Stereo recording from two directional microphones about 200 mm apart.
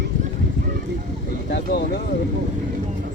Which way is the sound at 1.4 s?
60° left (ahead or behind).